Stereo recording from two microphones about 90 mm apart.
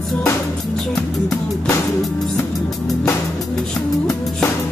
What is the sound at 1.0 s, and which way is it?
Music, 10° left (ahead or behind).